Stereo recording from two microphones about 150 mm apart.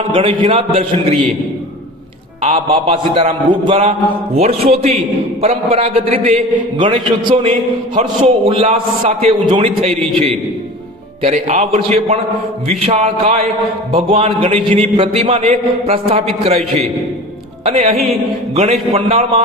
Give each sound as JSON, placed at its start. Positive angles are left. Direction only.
{"t": 0.1, "sound": "a man's voice", "side_deg": -35}
{"t": 2.4, "sound": "a man's voice", "side_deg": -50}